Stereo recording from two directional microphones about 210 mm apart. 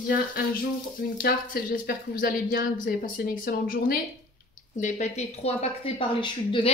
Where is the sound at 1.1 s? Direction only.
40° left (ahead or behind).